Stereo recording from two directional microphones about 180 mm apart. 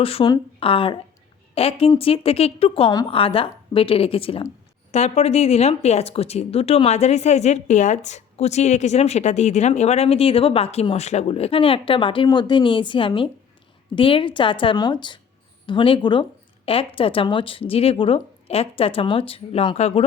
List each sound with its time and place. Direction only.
0.0 s a woman's voice: 30° left (ahead or behind)
2.9 s a woman's voice: 20° left (ahead or behind)
3.2 s a woman's voice: 30° left (ahead or behind)